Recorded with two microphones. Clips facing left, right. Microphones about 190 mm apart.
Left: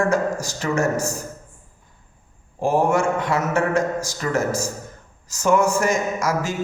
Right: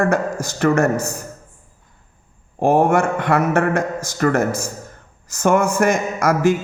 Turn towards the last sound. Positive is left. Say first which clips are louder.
# right 7 dB
turn(degrees=-60)  # may be behind; listen again after turning